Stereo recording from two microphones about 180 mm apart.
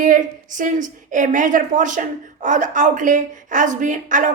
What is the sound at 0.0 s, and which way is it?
A woman's voice, 45° right (ahead or behind).